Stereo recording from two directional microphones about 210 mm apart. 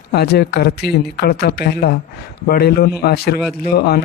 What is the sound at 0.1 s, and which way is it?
Speech, 50° left (ahead or behind).